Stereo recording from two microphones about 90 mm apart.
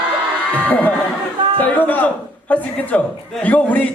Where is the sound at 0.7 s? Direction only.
20° left (ahead or behind).